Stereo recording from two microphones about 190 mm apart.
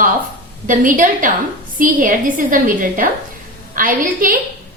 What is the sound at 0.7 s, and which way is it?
A woman's voice, 45° right (ahead or behind).